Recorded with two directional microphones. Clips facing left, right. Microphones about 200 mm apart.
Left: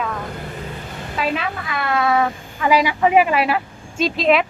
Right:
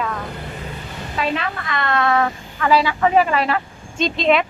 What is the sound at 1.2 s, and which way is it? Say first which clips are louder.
A woman's voice: even; 5° left (ahead or behind).